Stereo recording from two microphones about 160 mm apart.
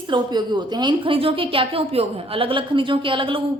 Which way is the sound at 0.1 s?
25° right (ahead or behind).